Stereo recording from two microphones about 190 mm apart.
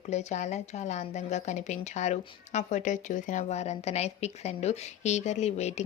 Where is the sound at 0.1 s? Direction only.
35° left (ahead or behind).